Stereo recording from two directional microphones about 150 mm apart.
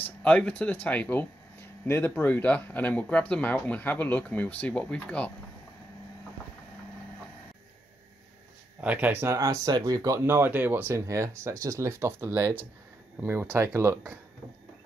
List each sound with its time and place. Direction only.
0.0 s speech: 10° left (ahead or behind)
8.8 s speech: 10° right (ahead or behind)